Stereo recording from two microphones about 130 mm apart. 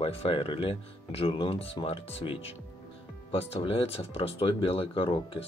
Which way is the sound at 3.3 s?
50° left (ahead or behind).